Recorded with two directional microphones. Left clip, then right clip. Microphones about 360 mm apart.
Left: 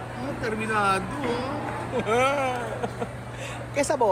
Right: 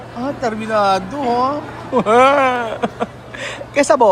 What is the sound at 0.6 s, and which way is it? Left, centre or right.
Speech, centre.